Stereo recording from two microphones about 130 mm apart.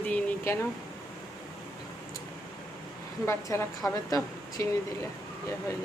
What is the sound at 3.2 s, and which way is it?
A woman's voice, 20° left (ahead or behind).